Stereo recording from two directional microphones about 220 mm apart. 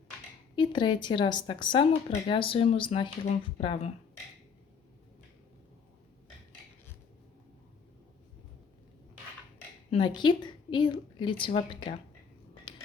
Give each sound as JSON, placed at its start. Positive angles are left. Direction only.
{"t": 0.5, "sound": "speech", "side_deg": 20}
{"t": 9.9, "sound": "speech", "side_deg": 20}